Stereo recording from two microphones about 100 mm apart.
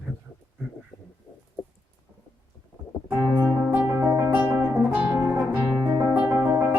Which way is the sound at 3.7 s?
15° right (ahead or behind).